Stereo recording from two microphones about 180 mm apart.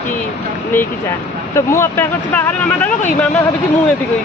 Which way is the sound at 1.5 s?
15° left (ahead or behind).